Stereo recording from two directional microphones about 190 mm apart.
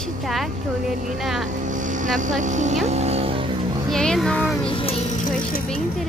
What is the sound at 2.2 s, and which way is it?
Speech, 40° right (ahead or behind).